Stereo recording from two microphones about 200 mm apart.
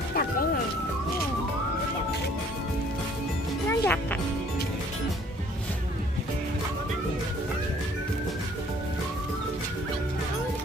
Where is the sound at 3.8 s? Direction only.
10° left (ahead or behind).